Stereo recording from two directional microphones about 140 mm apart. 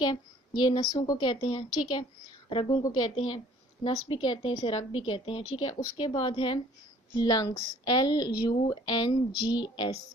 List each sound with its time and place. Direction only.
0.0 s a woman's voice: 30° left (ahead or behind)
2.7 s speech: 25° left (ahead or behind)
3.8 s a woman's voice: 35° left (ahead or behind)